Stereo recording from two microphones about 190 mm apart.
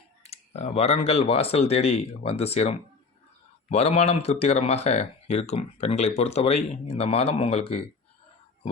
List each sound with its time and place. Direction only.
0.2 s speech: 35° left (ahead or behind)